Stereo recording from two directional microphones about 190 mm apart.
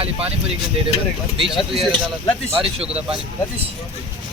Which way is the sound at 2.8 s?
5° right (ahead or behind).